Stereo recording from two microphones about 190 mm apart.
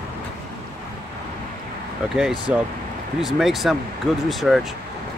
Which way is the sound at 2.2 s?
5° right (ahead or behind).